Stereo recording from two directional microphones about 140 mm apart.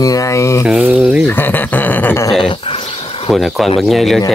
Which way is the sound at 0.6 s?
5° right (ahead or behind).